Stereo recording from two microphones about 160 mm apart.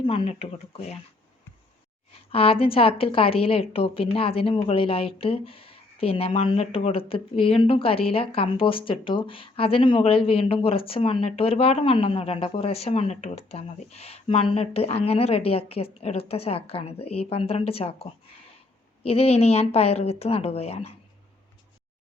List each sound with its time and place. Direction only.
0.0 s a woman's voice: 30° left (ahead or behind)
2.3 s a woman's voice: 35° left (ahead or behind)